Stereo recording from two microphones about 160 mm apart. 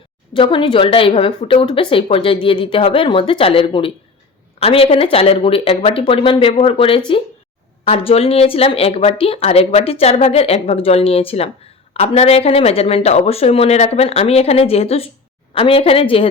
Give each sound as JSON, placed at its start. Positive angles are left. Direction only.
{"t": 0.3, "sound": "a woman's voice", "side_deg": 30}